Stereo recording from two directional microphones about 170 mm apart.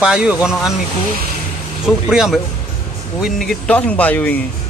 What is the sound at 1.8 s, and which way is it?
A man's voice, 5° right (ahead or behind).